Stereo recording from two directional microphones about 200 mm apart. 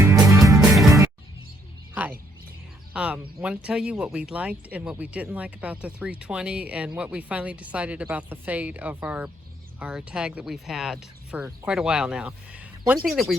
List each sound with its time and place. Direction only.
0.0 s music: 15° right (ahead or behind)
2.9 s speech: 5° right (ahead or behind)